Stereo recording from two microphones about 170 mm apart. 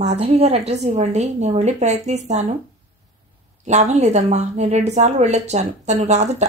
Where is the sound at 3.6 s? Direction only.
40° right (ahead or behind).